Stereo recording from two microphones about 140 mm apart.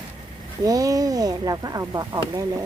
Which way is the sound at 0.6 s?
25° right (ahead or behind).